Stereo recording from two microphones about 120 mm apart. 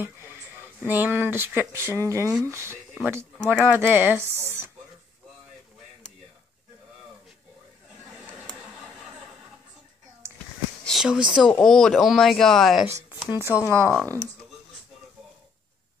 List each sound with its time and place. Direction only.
0.0 s a sound: 20° right (ahead or behind)
0.8 s speech: 15° right (ahead or behind)
3.3 s speech: 10° left (ahead or behind)
3.6 s speech: 15° right (ahead or behind)
10.8 s a sound: centre (ahead or behind)
11.2 s speech: 5° right (ahead or behind)
13.4 s speech: 25° left (ahead or behind)
13.8 s speech: 10° left (ahead or behind)